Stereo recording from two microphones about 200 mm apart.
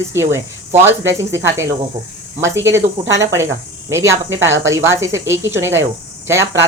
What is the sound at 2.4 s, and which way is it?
Speech, 15° right (ahead or behind).